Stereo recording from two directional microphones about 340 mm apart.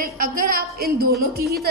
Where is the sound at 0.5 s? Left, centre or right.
Right.